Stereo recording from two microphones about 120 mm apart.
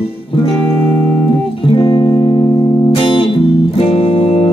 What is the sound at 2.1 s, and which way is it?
Music, 35° left (ahead or behind).